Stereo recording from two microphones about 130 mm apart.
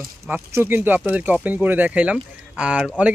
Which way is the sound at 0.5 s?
15° right (ahead or behind).